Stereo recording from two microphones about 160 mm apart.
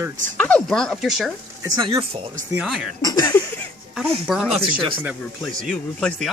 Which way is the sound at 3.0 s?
25° left (ahead or behind).